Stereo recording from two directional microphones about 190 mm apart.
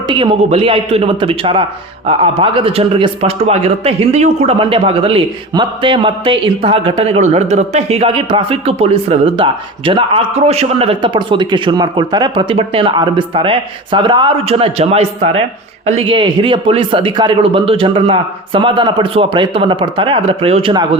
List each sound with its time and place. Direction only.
0.1 s a man's voice: 30° right (ahead or behind)